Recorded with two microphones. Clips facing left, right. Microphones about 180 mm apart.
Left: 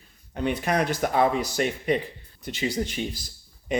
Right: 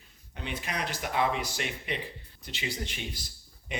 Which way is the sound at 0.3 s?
50° left (ahead or behind).